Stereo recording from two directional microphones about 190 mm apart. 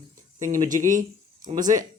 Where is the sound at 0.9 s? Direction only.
45° right (ahead or behind).